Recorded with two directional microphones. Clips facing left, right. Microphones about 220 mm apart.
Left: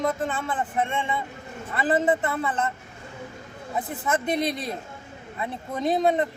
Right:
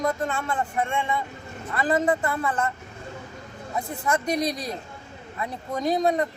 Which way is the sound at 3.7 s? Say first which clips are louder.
Even; 20° left (ahead or behind).